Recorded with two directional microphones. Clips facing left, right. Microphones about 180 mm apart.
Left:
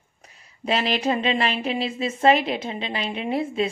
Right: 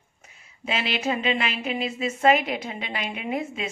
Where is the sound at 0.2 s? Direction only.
35° left (ahead or behind).